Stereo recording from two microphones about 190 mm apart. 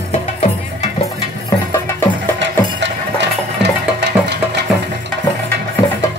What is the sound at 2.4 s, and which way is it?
Music, 65° right (ahead or behind).